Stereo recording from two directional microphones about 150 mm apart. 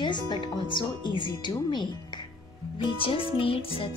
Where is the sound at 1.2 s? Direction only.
30° left (ahead or behind).